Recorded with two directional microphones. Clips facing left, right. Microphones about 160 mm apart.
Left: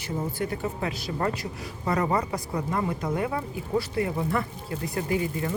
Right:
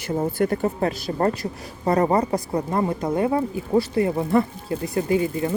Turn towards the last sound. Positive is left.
turn(degrees=-25)  # may be behind; listen again after turning